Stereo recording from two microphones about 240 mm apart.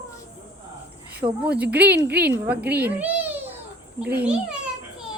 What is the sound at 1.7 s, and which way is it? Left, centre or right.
Speech, right.